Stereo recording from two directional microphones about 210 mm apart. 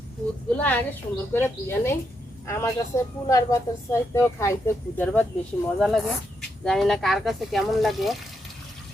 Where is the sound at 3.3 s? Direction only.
15° left (ahead or behind).